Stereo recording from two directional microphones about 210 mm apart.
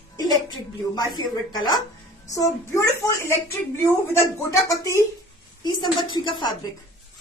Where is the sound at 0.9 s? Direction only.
20° left (ahead or behind).